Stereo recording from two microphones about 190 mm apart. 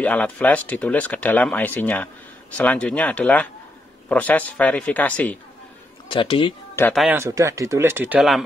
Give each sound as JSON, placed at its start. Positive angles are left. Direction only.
{"t": 0.0, "sound": "speech", "side_deg": 5}
{"t": 6.0, "sound": "speech", "side_deg": 25}
{"t": 6.9, "sound": "a man's voice", "side_deg": 0}
{"t": 7.2, "sound": "speech", "side_deg": -15}